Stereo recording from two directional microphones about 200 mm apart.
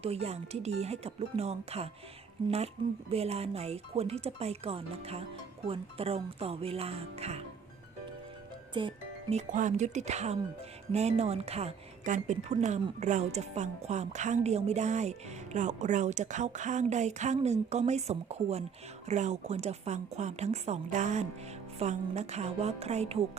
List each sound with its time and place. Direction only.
0.0 s a woman's voice: 30° right (ahead or behind)
3.1 s a woman's voice: 30° right (ahead or behind)
8.7 s speech: 25° right (ahead or behind)
9.3 s a woman's voice: 40° right (ahead or behind)